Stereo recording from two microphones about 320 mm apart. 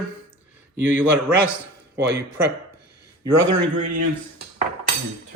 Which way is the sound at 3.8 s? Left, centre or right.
Right.